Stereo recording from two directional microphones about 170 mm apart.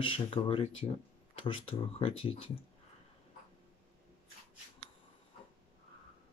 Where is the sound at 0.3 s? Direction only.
30° left (ahead or behind).